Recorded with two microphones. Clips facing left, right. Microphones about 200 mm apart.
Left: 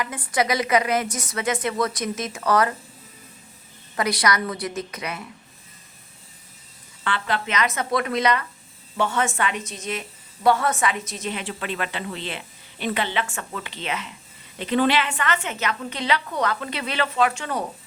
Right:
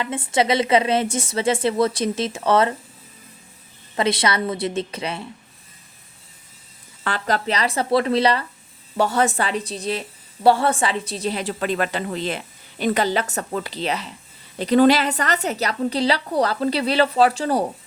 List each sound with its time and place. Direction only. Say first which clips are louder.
0.0 s a woman's voice: right 3 dB; 25° right (ahead or behind)
3.9 s a woman's voice: right 2 dB; 25° right (ahead or behind)
7.0 s a woman's voice: right 3 dB; 40° right (ahead or behind)